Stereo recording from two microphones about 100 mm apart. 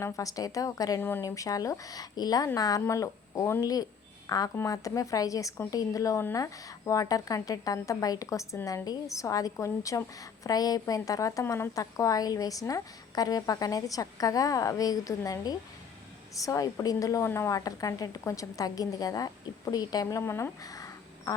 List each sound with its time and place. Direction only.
0.0 s a woman's voice: 35° left (ahead or behind)